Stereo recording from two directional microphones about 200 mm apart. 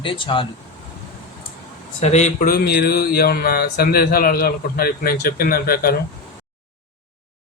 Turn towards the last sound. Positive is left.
turn(degrees=50)  # may be behind; listen again after turning